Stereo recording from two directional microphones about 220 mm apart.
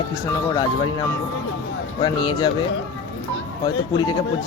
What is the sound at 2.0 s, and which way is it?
Speech, 20° left (ahead or behind).